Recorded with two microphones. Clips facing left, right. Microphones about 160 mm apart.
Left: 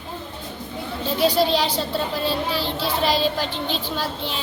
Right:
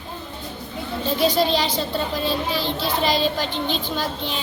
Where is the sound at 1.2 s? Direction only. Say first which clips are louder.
Left 1 dB; 10° left (ahead or behind).